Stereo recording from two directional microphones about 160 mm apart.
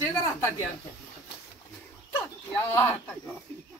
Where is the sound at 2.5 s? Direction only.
10° left (ahead or behind).